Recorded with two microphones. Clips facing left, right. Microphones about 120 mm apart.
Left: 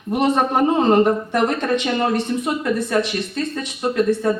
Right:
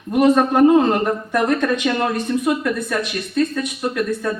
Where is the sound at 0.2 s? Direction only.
25° left (ahead or behind).